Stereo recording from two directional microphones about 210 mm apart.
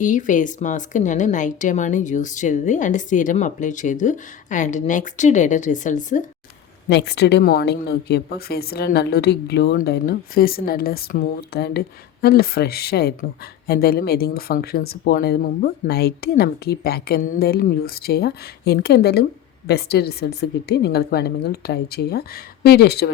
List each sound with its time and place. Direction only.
0.0 s a woman's voice: 40° left (ahead or behind)
6.8 s speech: 50° left (ahead or behind)